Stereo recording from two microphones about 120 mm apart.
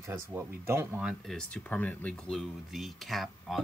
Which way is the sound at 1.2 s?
5° left (ahead or behind).